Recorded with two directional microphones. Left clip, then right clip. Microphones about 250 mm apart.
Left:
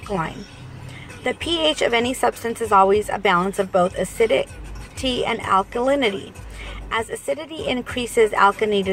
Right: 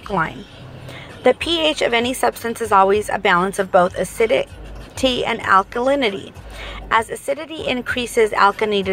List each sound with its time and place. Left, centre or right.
0.1 s a woman's voice: centre